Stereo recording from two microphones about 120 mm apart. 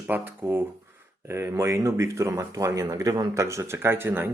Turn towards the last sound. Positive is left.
turn(degrees=-20)  # may be behind; listen again after turning